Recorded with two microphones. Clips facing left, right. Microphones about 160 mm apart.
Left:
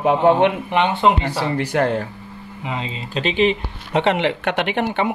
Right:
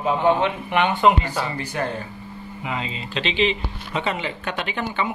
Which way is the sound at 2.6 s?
30° left (ahead or behind).